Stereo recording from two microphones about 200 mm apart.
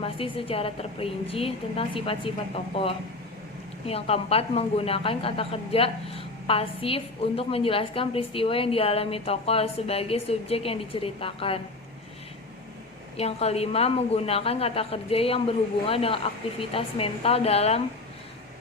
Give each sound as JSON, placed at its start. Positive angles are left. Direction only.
{"t": 0.0, "sound": "a woman's voice", "side_deg": 30}
{"t": 3.8, "sound": "a woman's voice", "side_deg": 30}
{"t": 13.1, "sound": "a woman's voice", "side_deg": 30}